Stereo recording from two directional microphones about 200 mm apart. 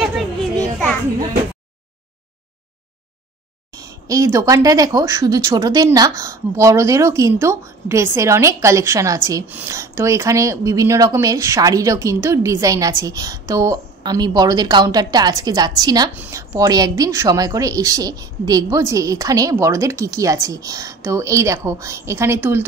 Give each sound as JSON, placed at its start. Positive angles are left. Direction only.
{"t": 0.0, "sound": "children playing", "side_deg": 5}
{"t": 3.7, "sound": "speech", "side_deg": -15}